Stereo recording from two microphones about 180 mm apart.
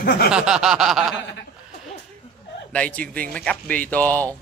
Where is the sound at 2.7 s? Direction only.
5° left (ahead or behind).